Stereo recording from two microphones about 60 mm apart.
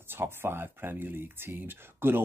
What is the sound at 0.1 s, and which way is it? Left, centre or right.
Speech, right.